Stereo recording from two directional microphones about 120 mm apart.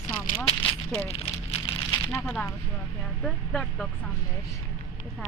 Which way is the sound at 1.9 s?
25° left (ahead or behind).